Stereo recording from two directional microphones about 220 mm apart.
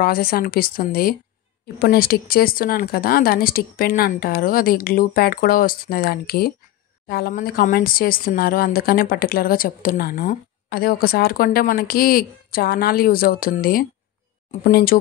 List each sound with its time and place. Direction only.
0.0 s speech: 40° left (ahead or behind)